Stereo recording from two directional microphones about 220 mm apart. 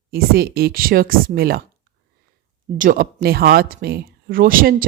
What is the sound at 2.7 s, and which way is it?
Speech, 40° right (ahead or behind).